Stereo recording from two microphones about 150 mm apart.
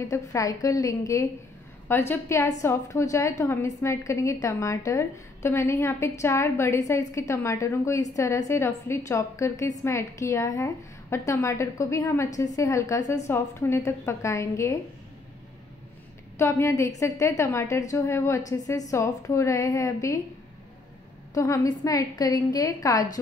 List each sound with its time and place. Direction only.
0.1 s a woman's voice: 20° left (ahead or behind)
16.3 s a woman's voice: 15° left (ahead or behind)
21.3 s a woman's voice: 20° left (ahead or behind)